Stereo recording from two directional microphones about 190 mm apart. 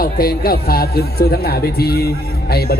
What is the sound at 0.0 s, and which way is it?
Speech, 50° left (ahead or behind).